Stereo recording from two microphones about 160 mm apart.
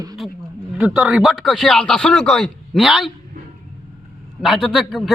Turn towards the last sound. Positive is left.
turn(degrees=5)  # may be behind; listen again after turning